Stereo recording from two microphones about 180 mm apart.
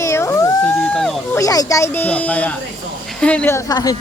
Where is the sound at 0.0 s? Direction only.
15° left (ahead or behind).